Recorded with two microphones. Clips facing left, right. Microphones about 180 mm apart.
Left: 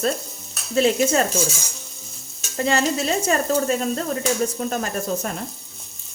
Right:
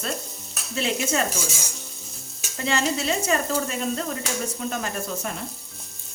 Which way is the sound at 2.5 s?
40° left (ahead or behind).